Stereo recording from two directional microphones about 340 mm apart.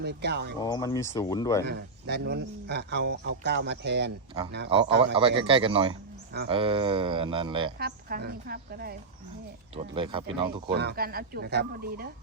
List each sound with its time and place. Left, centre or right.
0.0 s speech: right
0.6 s speech: centre
1.6 s speech: right
5.1 s speech: centre
5.9 s a sound: right
6.5 s speech: centre
7.8 s speech: right
9.7 s speech: centre
10.8 s speech: right